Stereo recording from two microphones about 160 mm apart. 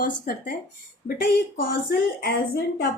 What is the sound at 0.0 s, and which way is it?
A woman's voice, 60° left (ahead or behind).